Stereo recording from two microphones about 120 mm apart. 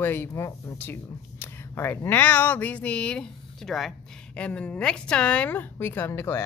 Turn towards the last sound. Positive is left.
turn(degrees=20)  # may be behind; listen again after turning